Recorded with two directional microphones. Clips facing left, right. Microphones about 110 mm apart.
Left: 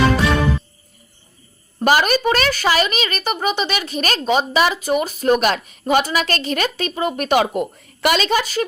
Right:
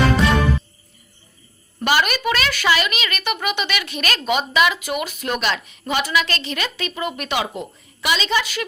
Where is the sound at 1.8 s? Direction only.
40° left (ahead or behind).